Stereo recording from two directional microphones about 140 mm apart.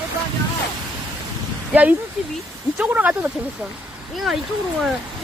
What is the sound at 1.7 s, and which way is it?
Speech, 10° right (ahead or behind).